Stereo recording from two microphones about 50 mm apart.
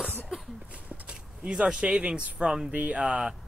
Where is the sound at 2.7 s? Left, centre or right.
Right.